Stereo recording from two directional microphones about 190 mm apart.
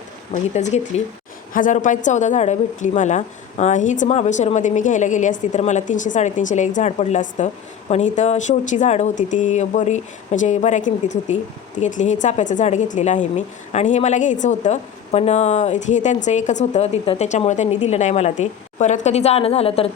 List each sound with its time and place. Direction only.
0.5 s a woman's voice: 35° left (ahead or behind)